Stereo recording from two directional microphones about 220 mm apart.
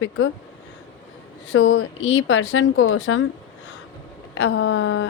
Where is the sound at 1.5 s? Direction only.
60° left (ahead or behind).